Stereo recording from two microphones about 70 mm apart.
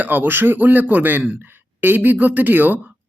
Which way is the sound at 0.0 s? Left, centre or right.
Right.